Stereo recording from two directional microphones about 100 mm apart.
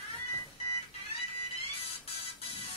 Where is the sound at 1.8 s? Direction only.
75° left (ahead or behind).